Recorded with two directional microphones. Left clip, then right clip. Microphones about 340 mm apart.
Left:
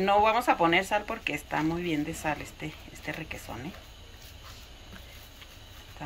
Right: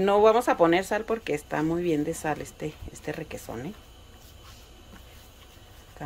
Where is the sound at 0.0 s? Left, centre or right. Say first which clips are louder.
Right 3 dB; right.